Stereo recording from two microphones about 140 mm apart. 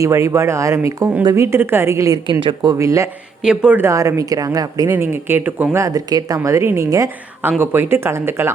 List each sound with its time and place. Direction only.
0.0 s a woman's voice: 20° right (ahead or behind)
2.2 s a woman's voice: 35° right (ahead or behind)
3.4 s a woman's voice: 5° right (ahead or behind)